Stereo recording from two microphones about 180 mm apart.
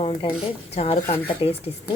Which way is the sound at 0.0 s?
35° left (ahead or behind).